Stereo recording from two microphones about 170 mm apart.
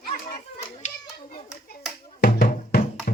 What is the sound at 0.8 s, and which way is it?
Children playing, 45° left (ahead or behind).